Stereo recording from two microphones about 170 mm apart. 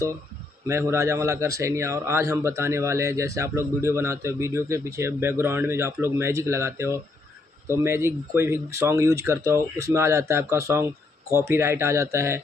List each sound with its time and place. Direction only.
0.7 s speech: 15° right (ahead or behind)